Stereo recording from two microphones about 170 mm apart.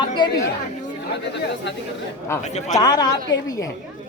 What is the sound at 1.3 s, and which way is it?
Speech, 90° left.